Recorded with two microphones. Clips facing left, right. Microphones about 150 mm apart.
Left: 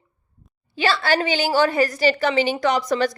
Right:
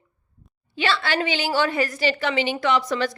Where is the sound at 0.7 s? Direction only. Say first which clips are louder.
Left 3 dB; 40° left (ahead or behind).